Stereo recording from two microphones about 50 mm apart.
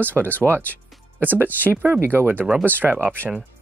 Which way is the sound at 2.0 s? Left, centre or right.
Right.